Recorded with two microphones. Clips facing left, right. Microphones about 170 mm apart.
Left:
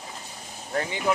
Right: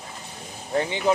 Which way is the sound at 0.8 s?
25° right (ahead or behind).